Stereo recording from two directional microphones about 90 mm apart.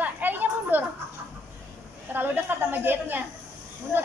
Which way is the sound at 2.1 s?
25° right (ahead or behind).